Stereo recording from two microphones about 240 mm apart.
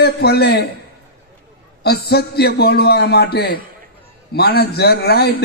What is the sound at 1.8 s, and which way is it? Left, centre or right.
A man's voice, left.